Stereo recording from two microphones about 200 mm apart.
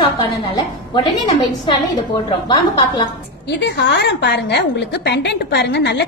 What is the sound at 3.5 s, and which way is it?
A woman's voice, 60° left (ahead or behind).